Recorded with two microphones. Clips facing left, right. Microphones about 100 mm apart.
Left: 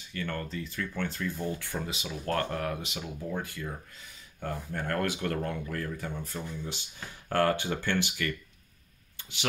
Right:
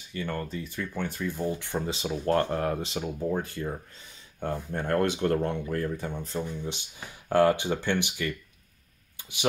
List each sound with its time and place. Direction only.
0.1 s speech: 15° right (ahead or behind)